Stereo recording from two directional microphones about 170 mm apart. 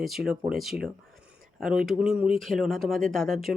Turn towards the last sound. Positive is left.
turn(degrees=0)  # may be behind; listen again after turning